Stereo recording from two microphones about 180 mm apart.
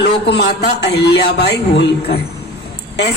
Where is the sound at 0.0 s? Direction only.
65° left (ahead or behind).